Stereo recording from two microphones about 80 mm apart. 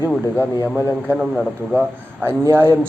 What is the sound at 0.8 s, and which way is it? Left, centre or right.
Speech, left.